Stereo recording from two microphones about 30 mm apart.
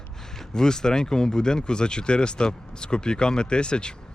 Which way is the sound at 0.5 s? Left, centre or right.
Left.